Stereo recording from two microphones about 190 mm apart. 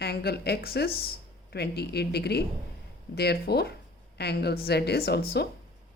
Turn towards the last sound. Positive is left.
turn(degrees=55)  # may be behind; listen again after turning